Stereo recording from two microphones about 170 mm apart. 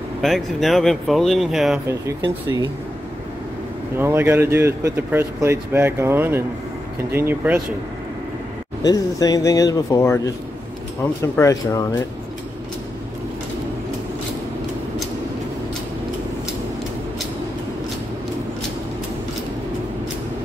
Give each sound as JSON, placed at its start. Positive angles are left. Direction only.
{"t": 0.2, "sound": "speech", "side_deg": 0}
{"t": 1.9, "sound": "speech", "side_deg": -20}
{"t": 4.0, "sound": "speech", "side_deg": -15}
{"t": 8.8, "sound": "speech", "side_deg": 20}
{"t": 11.3, "sound": "speech", "side_deg": 15}